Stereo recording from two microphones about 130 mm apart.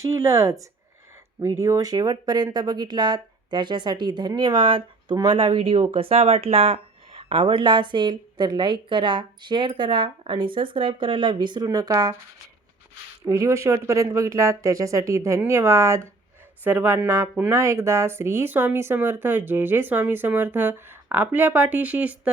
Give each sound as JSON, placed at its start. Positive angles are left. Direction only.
{"t": 0.0, "sound": "speech", "side_deg": -25}
{"t": 13.2, "sound": "speech", "side_deg": -20}